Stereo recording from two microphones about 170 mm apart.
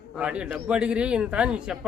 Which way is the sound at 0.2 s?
5° right (ahead or behind).